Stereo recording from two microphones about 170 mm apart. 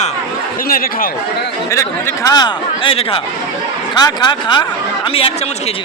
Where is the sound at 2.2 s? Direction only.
25° left (ahead or behind).